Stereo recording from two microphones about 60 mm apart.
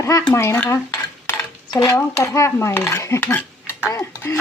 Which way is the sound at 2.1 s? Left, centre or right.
Left.